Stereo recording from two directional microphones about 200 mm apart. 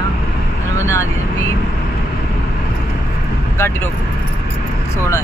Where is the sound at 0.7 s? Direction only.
15° left (ahead or behind).